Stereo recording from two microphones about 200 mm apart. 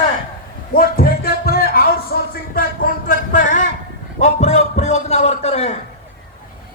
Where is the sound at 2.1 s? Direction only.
50° left (ahead or behind); by 5.7 s 30° left (ahead or behind).